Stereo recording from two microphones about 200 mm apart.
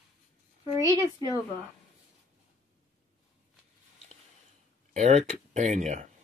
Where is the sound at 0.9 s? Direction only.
15° right (ahead or behind).